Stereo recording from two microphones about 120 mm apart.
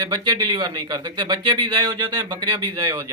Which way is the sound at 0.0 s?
35° right (ahead or behind).